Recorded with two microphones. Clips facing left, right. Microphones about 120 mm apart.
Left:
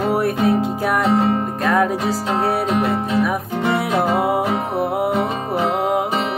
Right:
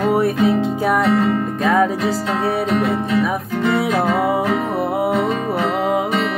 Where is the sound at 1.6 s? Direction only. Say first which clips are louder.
Right 2 dB; centre (ahead or behind).